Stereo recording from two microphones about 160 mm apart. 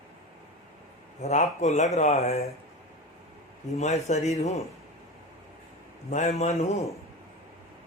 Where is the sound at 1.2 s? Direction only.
45° left (ahead or behind).